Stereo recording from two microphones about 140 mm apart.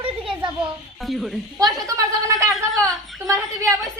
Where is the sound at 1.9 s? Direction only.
20° right (ahead or behind).